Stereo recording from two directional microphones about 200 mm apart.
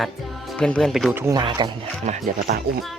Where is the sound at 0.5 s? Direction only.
5° left (ahead or behind).